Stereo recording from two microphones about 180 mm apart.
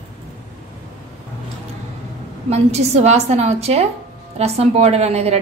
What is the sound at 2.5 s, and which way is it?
A woman's voice, 35° right (ahead or behind).